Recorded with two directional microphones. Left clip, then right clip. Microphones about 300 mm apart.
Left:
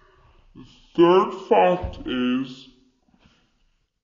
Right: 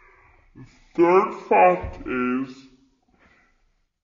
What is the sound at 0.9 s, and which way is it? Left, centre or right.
Speech, left.